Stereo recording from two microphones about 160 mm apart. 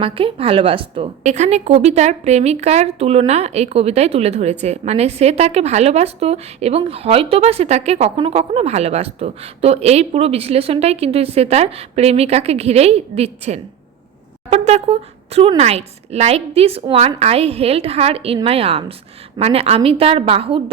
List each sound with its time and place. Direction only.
0.0 s a woman's voice: 35° right (ahead or behind)
1.3 s a woman's voice: 45° right (ahead or behind)